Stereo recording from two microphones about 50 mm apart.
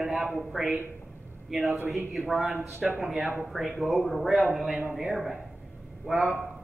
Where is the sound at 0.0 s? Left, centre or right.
Centre.